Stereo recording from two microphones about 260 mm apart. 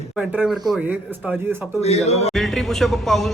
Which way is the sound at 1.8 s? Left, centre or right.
Left.